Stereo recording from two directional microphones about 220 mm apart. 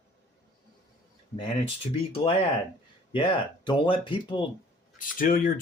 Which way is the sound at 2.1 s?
25° left (ahead or behind).